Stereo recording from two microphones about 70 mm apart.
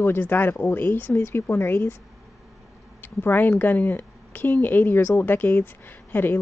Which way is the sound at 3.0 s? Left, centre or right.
Left.